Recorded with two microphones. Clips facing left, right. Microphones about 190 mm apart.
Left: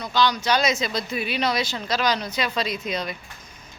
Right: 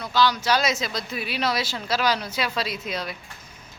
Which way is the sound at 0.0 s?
5° right (ahead or behind).